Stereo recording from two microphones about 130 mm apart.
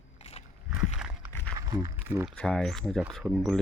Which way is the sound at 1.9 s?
15° right (ahead or behind).